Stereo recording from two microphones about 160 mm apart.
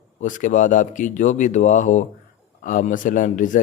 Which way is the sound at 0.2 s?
50° left (ahead or behind).